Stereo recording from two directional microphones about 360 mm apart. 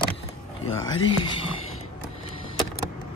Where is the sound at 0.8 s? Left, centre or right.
Centre.